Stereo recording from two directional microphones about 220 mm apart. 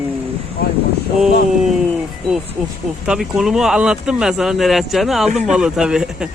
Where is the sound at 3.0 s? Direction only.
5° right (ahead or behind).